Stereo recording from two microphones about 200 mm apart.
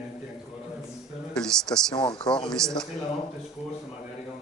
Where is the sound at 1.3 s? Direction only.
5° left (ahead or behind).